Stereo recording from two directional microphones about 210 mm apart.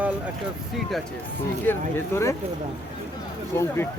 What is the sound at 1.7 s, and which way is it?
Speech, 10° left (ahead or behind).